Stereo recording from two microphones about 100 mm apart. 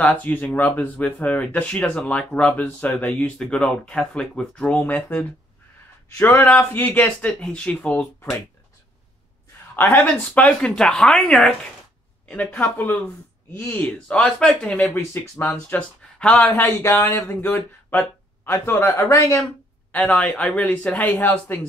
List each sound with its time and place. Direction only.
0.0 s speech: 15° left (ahead or behind)
6.3 s speech: 20° left (ahead or behind)
9.8 s speech: 20° left (ahead or behind)
12.3 s speech: 15° left (ahead or behind)
15.0 s speech: 25° left (ahead or behind)
16.2 s speech: 10° left (ahead or behind)
16.8 s speech: 30° left (ahead or behind)
19.9 s speech: 15° left (ahead or behind)